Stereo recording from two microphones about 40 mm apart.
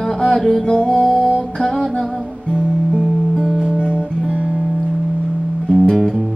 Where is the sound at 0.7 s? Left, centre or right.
Left.